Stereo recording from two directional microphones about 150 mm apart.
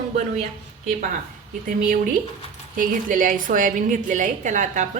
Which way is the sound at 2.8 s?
60° right (ahead or behind).